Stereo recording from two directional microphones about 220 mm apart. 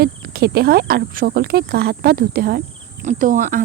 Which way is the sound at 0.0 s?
45° right (ahead or behind).